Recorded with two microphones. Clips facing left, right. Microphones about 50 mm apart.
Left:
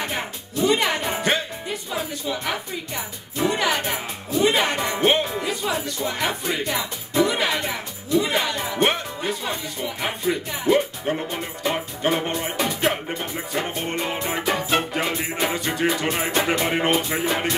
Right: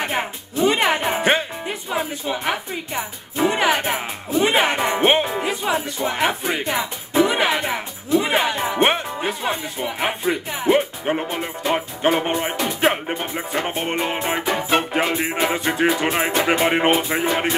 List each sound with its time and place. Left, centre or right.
0.0 s speech: right
14.6 s music: right
15.1 s speech: right